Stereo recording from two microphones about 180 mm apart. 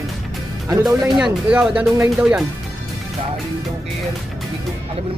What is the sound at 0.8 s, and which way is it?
Speech, 5° right (ahead or behind).